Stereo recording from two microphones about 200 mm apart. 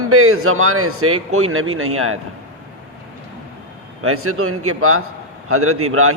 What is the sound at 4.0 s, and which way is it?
A man's voice, 90° right.